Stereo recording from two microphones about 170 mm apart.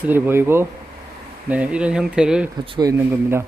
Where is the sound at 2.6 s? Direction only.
30° right (ahead or behind).